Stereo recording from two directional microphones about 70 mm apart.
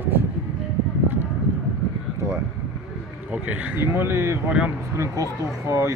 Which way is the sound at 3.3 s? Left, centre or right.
Right.